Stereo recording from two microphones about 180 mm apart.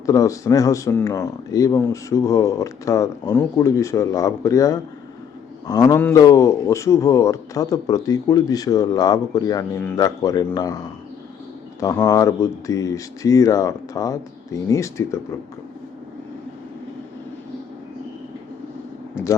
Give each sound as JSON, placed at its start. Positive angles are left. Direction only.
{"t": 0.0, "sound": "a man's voice", "side_deg": 15}
{"t": 11.8, "sound": "a man's voice", "side_deg": 20}